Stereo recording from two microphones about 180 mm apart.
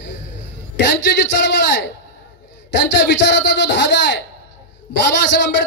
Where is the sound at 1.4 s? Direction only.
70° left (ahead or behind).